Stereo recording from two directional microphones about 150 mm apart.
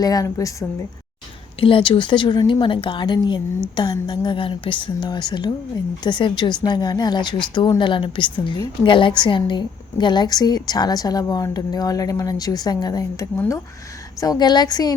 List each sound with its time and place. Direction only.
0.0 s a woman's voice: 25° left (ahead or behind)
1.5 s a woman's voice: 35° left (ahead or behind)